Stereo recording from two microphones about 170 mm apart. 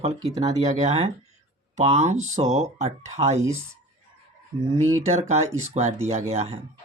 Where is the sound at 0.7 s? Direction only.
45° right (ahead or behind).